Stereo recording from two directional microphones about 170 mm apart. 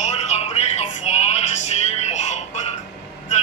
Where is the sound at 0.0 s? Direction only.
40° left (ahead or behind).